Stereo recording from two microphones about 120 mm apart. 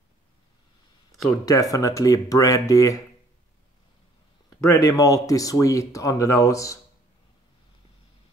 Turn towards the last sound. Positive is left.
turn(degrees=30)  # may be behind; listen again after turning